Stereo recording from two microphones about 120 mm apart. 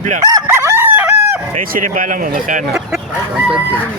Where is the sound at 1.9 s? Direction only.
90° right.